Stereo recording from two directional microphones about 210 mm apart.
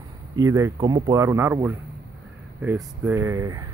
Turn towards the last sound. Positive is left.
turn(degrees=-15)  # may be behind; listen again after turning